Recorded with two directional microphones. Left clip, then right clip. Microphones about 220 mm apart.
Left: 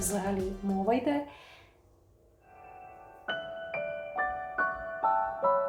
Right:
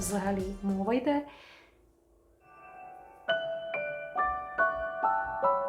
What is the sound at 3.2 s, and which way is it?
Music, 5° right (ahead or behind).